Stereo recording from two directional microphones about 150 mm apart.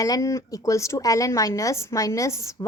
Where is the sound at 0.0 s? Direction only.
20° left (ahead or behind).